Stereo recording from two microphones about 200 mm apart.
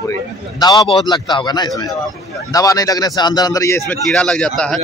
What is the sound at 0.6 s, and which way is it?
A man's voice, 20° left (ahead or behind).